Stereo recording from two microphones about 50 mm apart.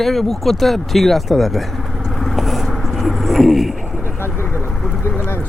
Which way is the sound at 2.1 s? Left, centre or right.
Centre.